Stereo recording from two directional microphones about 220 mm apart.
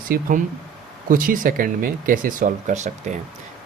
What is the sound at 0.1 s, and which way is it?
Speech, 35° right (ahead or behind).